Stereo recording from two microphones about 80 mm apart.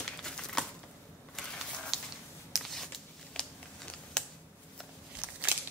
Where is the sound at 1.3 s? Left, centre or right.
Centre.